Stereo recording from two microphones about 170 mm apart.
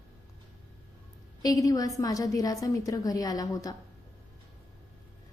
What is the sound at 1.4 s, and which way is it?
A woman's voice, 20° left (ahead or behind).